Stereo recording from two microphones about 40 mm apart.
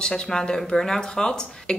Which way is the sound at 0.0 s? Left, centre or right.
Centre.